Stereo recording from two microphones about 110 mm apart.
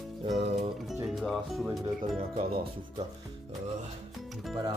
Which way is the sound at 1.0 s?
Centre (ahead or behind).